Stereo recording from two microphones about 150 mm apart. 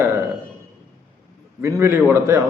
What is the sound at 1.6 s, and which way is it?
Speech, 20° right (ahead or behind).